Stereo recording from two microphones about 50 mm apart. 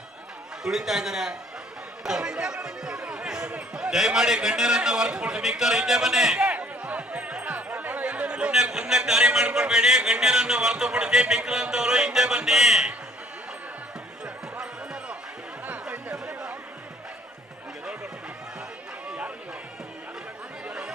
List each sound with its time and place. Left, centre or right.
0.6 s music: centre
3.2 s a sound: centre
3.8 s music: centre
6.3 s chatter: right
8.7 s music: centre
15.6 s chatter: right
16.1 s a sound: centre